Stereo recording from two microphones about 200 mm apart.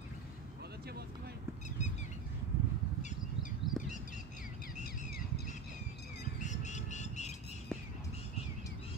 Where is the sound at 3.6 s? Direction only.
25° right (ahead or behind).